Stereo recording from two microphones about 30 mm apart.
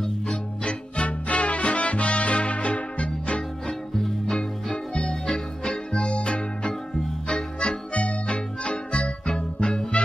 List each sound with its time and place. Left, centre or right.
0.0 s music: left
0.9 s music: left
4.3 s music: left
5.7 s music: left
7.2 s music: left
9.6 s music: left